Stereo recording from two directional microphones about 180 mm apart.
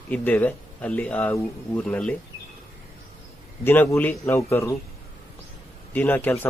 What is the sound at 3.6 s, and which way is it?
Speech, 10° left (ahead or behind).